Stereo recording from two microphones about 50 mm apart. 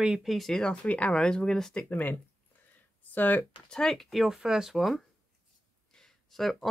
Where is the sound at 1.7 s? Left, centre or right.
Left.